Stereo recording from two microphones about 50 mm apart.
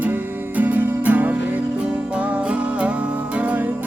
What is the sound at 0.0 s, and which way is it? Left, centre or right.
Music, right.